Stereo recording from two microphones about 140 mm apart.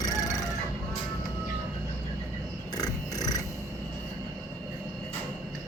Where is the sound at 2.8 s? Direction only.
25° left (ahead or behind).